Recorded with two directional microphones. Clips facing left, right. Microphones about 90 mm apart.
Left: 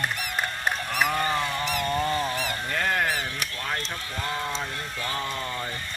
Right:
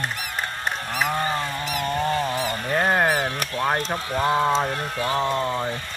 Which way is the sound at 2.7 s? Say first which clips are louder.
Right 6 dB; 40° right (ahead or behind).